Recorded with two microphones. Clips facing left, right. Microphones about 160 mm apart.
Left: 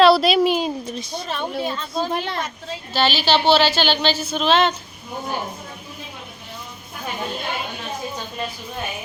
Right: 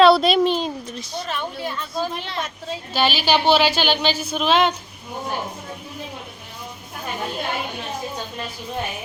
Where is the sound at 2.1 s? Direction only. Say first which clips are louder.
Left 4 dB; 55° left (ahead or behind).